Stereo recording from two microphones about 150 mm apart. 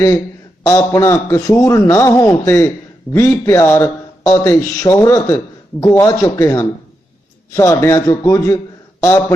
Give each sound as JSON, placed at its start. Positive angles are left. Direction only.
{"t": 0.7, "sound": "a man's voice", "side_deg": 20}